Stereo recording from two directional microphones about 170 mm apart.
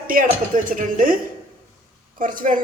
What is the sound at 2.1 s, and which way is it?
Speech, 50° right (ahead or behind).